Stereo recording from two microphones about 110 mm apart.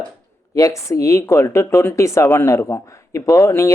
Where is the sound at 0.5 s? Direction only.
30° left (ahead or behind).